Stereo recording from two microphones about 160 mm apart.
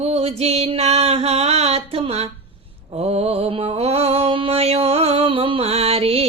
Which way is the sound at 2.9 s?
40° right (ahead or behind).